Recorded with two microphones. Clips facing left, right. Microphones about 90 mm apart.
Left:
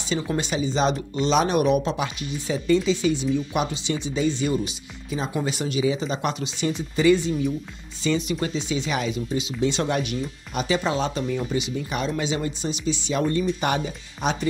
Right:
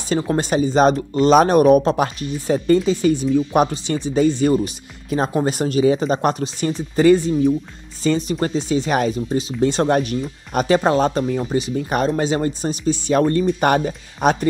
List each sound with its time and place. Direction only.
0.1 s speech: 40° right (ahead or behind)